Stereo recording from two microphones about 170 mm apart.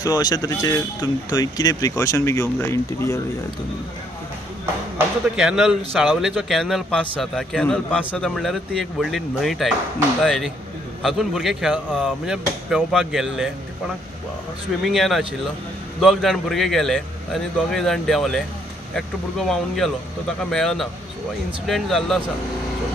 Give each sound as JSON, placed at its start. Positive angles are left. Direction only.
{"t": 0.0, "sound": "speech", "side_deg": 20}
{"t": 4.9, "sound": "speech", "side_deg": -5}
{"t": 14.8, "sound": "speech", "side_deg": 0}